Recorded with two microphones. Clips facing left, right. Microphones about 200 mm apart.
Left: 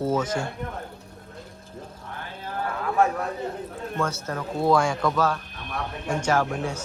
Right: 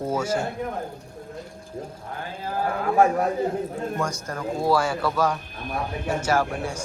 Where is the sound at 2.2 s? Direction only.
40° right (ahead or behind).